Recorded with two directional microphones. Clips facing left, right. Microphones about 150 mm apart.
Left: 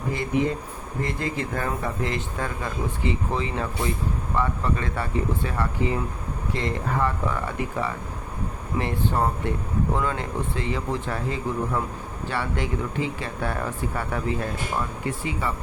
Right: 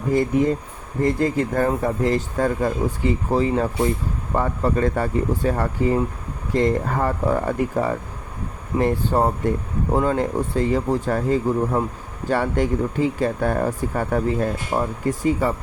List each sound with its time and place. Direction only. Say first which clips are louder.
0.1 s speech: right 6 dB; 45° right (ahead or behind)